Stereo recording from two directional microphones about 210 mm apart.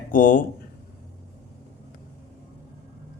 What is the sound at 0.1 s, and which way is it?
Speech, 40° left (ahead or behind).